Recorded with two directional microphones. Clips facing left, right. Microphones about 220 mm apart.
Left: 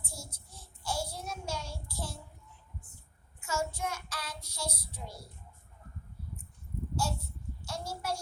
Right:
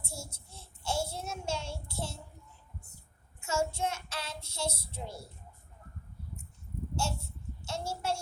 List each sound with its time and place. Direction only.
0.0 s child singing: 25° right (ahead or behind)
3.4 s child singing: 25° right (ahead or behind)
6.9 s a sound: 25° right (ahead or behind)